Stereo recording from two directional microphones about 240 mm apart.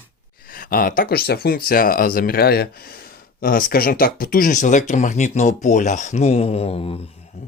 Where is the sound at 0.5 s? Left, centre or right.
Left.